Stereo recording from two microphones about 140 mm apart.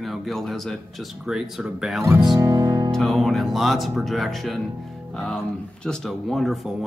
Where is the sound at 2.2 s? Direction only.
30° right (ahead or behind).